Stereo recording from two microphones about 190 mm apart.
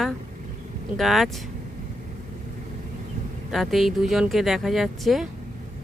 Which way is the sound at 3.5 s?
Centre (ahead or behind).